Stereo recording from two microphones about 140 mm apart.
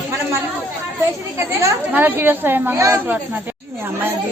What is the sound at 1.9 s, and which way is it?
Speech, 15° right (ahead or behind).